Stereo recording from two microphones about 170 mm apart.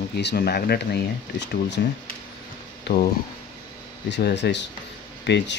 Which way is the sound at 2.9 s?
90° left.